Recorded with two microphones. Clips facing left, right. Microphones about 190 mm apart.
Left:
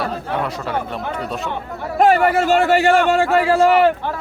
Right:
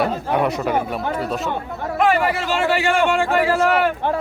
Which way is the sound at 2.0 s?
40° left (ahead or behind).